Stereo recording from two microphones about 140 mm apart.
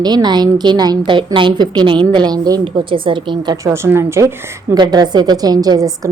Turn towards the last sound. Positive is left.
turn(degrees=-25)  # may be behind; listen again after turning